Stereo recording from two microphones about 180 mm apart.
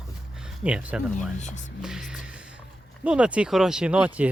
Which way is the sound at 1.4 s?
40° left (ahead or behind).